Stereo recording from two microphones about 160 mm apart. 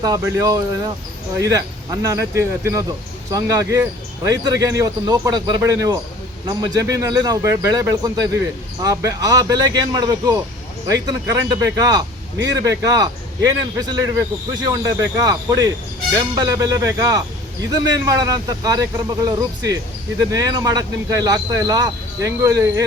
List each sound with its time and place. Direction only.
0.0 s a man's voice: 25° right (ahead or behind)